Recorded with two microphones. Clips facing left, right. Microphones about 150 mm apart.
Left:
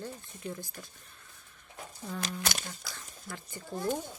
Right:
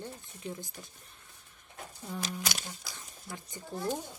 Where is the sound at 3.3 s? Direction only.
20° right (ahead or behind).